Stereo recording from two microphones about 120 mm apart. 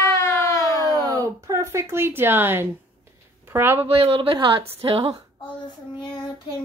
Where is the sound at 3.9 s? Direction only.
50° right (ahead or behind).